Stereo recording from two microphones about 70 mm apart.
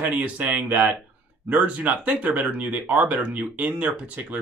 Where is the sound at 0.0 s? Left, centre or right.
Right.